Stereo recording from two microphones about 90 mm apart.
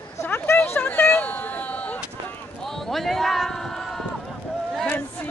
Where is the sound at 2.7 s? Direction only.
Centre (ahead or behind).